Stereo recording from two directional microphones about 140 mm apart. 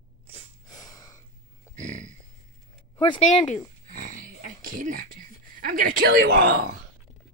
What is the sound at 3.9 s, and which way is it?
Dog, 75° right (ahead or behind).